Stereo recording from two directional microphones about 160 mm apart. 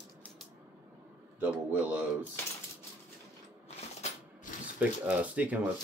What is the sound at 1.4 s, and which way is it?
Speech, 10° right (ahead or behind).